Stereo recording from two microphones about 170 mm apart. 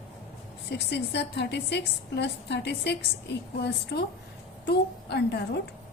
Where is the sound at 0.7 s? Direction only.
85° left.